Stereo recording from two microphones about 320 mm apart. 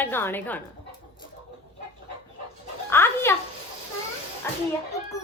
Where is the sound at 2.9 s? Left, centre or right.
Centre.